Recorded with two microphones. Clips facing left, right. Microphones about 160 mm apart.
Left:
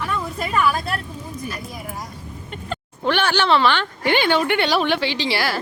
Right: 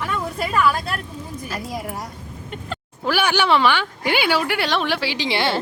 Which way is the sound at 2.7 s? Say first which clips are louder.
Left 1 dB; 5° right (ahead or behind).